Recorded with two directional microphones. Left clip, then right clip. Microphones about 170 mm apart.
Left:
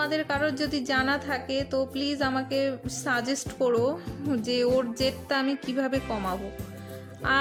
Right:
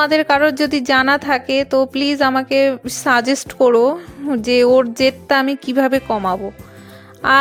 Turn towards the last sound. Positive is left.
turn(degrees=-50)  # may be behind; listen again after turning